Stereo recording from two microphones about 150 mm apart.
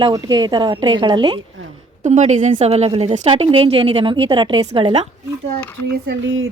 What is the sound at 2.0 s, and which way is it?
A woman's voice, 50° right (ahead or behind).